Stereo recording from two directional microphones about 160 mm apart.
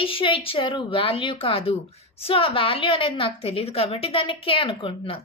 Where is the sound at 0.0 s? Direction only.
35° left (ahead or behind).